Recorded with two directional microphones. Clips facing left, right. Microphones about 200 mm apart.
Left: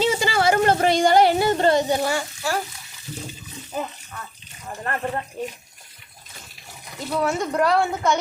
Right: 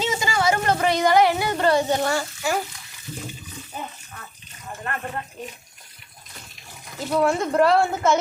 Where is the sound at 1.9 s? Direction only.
5° left (ahead or behind).